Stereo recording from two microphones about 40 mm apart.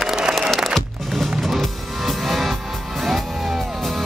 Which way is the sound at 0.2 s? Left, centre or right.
Centre.